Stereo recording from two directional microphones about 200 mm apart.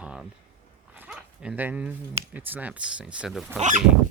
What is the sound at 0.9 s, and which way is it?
Dog, 5° right (ahead or behind).